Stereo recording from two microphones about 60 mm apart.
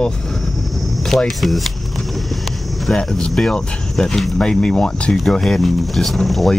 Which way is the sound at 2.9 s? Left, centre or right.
Centre.